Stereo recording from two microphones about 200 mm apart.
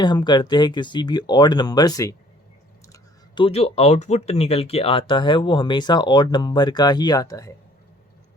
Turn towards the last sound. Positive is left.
turn(degrees=15)  # may be behind; listen again after turning